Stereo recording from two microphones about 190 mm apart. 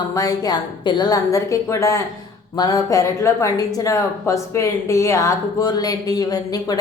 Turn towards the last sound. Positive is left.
turn(degrees=20)  # may be behind; listen again after turning